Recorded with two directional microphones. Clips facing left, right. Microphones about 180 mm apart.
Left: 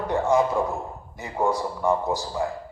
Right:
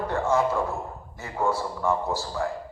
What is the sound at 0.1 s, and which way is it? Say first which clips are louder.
A man's voice: left 3 dB; 15° left (ahead or behind).